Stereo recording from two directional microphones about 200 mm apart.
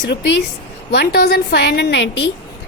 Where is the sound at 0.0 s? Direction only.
60° left (ahead or behind).